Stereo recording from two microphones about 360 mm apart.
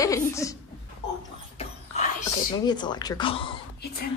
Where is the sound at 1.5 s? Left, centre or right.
Centre.